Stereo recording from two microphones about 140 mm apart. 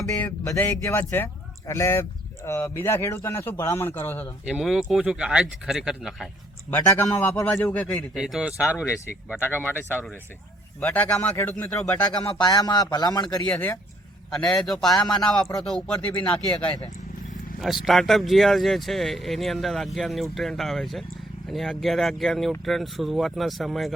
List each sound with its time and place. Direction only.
0.0 s speech: 20° left (ahead or behind)
4.4 s speech: centre (ahead or behind)
6.7 s a man's voice: 15° left (ahead or behind)
8.1 s speech: 5° right (ahead or behind)
9.6 s a man's voice: 15° left (ahead or behind)
12.2 s speech: 30° left (ahead or behind)
13.4 s a man's voice: 10° left (ahead or behind)
17.8 s speech: centre (ahead or behind)